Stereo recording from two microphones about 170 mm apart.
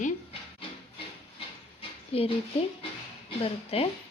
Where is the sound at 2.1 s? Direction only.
35° left (ahead or behind).